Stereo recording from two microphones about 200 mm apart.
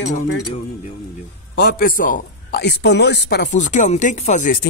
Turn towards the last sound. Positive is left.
turn(degrees=40)  # may be behind; listen again after turning